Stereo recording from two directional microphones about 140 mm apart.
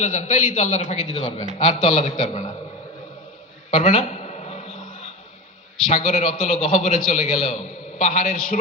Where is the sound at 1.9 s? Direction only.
55° left (ahead or behind).